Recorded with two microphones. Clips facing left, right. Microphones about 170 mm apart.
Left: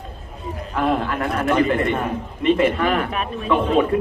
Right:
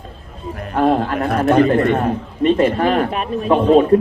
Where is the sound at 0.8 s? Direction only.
40° right (ahead or behind).